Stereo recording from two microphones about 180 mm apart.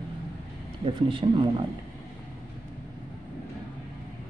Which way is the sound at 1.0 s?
30° right (ahead or behind).